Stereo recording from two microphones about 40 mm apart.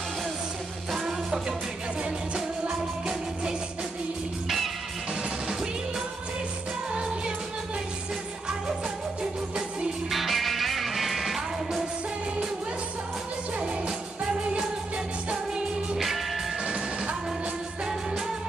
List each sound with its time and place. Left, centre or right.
0.9 s music: centre
6.9 s music: right
10.1 s music: centre
13.6 s music: right